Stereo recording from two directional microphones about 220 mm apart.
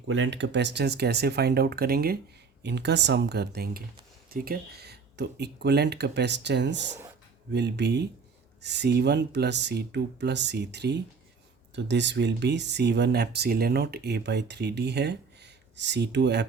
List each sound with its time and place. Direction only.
0.1 s speech: 55° right (ahead or behind)